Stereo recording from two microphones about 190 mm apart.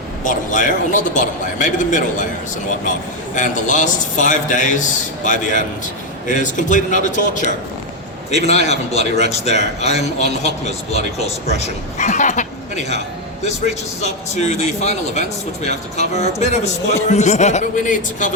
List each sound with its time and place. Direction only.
0.3 s speech: 40° left (ahead or behind)
3.3 s speech: 40° left (ahead or behind)
14.0 s speech: 35° left (ahead or behind)